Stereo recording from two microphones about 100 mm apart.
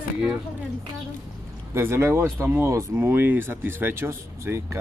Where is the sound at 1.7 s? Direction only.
25° right (ahead or behind).